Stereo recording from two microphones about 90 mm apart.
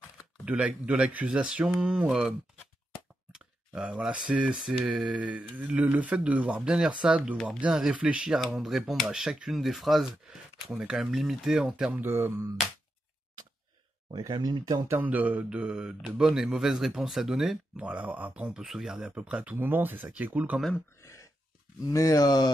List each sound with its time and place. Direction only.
0.5 s speech: 15° right (ahead or behind)
12.0 s speech: 25° right (ahead or behind)
14.1 s speech: 50° right (ahead or behind)
14.9 s speech: 20° right (ahead or behind); by 17.8 s 5° right (ahead or behind)
17.8 s speech: 15° right (ahead or behind)
21.0 s a sound: 35° left (ahead or behind)
21.8 s speech: 40° left (ahead or behind)